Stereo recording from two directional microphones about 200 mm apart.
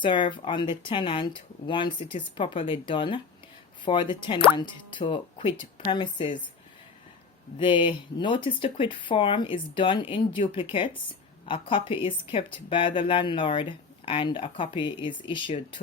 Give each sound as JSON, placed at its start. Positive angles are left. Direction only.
{"t": 0.0, "sound": "speech", "side_deg": 25}
{"t": 7.6, "sound": "speech", "side_deg": 25}